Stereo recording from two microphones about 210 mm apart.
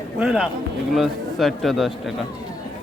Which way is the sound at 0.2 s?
5° right (ahead or behind).